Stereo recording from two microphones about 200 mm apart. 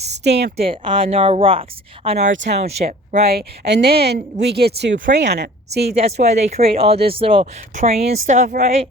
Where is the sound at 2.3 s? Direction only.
60° right (ahead or behind).